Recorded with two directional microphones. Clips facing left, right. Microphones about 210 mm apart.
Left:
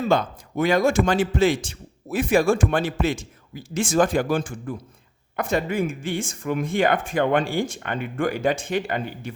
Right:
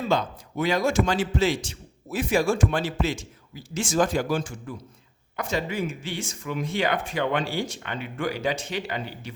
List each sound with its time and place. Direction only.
0.1 s a man's voice: 50° left (ahead or behind)